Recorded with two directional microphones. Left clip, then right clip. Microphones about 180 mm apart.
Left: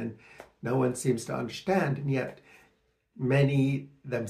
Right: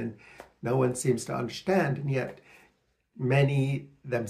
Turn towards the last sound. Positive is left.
turn(degrees=-15)  # may be behind; listen again after turning